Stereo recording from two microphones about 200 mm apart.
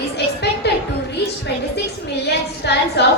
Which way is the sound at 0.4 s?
55° left (ahead or behind).